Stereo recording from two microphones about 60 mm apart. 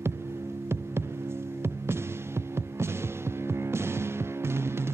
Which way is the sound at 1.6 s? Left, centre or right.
Right.